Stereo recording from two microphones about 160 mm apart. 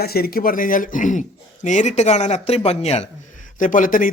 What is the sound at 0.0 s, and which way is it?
A man's voice, 75° left (ahead or behind).